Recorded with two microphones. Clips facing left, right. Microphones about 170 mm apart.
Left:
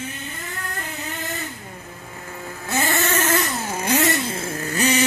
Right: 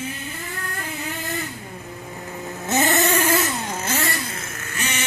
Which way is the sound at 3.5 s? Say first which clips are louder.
Left 3 dB; 5° left (ahead or behind).